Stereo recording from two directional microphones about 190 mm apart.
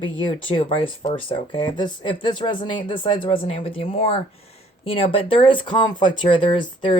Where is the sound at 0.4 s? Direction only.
30° left (ahead or behind).